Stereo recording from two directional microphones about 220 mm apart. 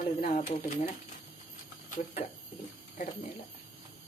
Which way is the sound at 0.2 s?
35° left (ahead or behind).